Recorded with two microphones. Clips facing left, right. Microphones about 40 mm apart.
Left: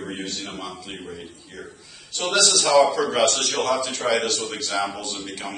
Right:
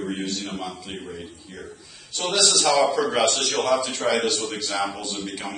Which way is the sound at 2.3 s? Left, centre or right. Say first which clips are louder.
Left 2 dB; centre.